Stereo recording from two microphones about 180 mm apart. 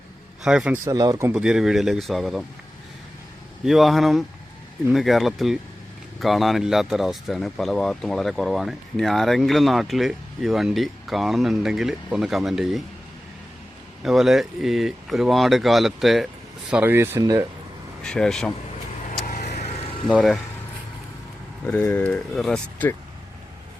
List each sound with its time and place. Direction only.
0.4 s speech: 5° right (ahead or behind)
0.9 s speech: 20° right (ahead or behind)
1.3 s speech: 5° right (ahead or behind)
3.7 s speech: centre (ahead or behind)
14.0 s speech: centre (ahead or behind); by 17.4 s 20° right (ahead or behind)
18.0 s speech: 5° left (ahead or behind)
19.2 s vehicle: 45° left (ahead or behind)
20.1 s speech: centre (ahead or behind)
21.7 s speech: 10° left (ahead or behind)